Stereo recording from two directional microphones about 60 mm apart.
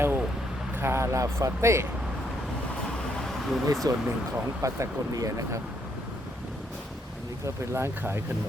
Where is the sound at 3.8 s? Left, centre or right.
Right.